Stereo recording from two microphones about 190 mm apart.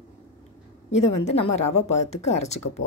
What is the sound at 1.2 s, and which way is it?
Speech, 35° left (ahead or behind).